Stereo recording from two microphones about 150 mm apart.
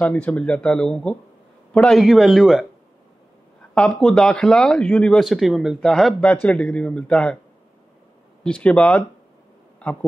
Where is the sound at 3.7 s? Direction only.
5° left (ahead or behind).